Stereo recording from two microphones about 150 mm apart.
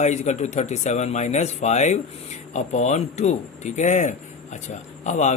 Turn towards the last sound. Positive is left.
turn(degrees=50)  # may be behind; listen again after turning